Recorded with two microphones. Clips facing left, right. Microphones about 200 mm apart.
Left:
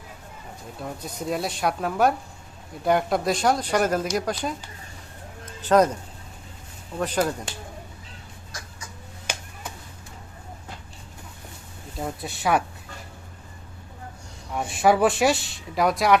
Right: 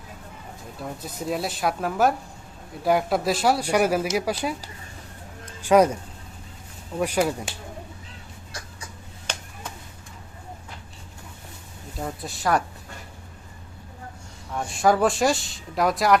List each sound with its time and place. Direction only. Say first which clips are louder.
0.8 s speech: even; centre (ahead or behind)
5.5 s a sound: right 1 dB; 10° right (ahead or behind)
7.0 s speech: right 1 dB; 10° right (ahead or behind)
9.3 s a sound: left 1 dB; 10° left (ahead or behind)
11.9 s speech: left 1 dB; centre (ahead or behind)
14.8 s speech: left 1 dB; 5° left (ahead or behind)